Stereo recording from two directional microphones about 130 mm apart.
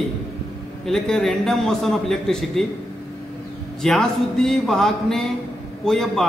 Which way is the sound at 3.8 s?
5° left (ahead or behind).